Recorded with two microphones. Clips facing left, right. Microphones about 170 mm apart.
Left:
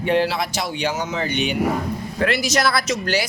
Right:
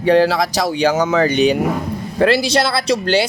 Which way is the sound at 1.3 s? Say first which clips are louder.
Right 6 dB; 35° right (ahead or behind).